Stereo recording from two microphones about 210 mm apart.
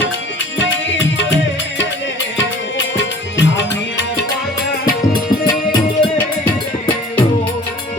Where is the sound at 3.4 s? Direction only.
60° left (ahead or behind).